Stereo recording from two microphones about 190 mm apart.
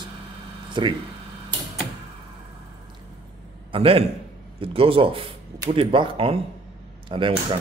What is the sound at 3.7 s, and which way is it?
A man's voice, 30° right (ahead or behind).